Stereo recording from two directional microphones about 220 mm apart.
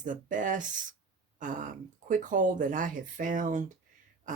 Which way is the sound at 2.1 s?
35° right (ahead or behind).